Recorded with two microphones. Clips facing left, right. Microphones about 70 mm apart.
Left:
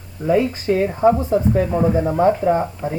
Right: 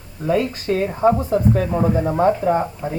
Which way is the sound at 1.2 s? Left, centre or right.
Centre.